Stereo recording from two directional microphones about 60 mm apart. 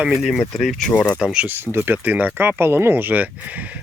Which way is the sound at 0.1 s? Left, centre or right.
Centre.